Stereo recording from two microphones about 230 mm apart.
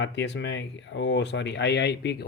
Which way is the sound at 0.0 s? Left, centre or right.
Left.